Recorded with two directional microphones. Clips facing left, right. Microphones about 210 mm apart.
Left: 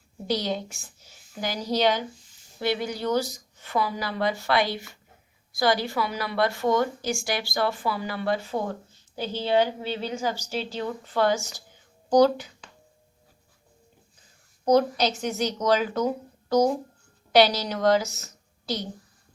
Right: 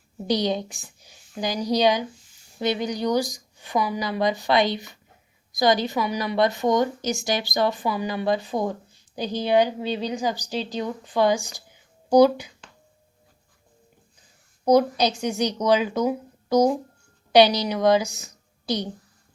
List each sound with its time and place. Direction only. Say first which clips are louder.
0.3 s a woman's voice: right 4 dB; 15° right (ahead or behind)
14.6 s a woman's voice: right 2 dB; 10° right (ahead or behind)